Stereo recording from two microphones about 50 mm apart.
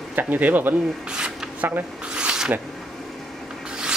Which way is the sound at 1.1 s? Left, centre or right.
Centre.